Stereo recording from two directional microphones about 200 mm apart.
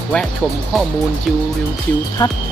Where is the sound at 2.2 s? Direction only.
15° left (ahead or behind).